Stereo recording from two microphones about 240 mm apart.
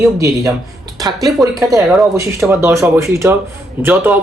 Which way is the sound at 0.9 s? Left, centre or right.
Centre.